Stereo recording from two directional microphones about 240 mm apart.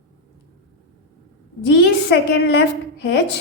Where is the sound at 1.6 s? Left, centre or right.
Left.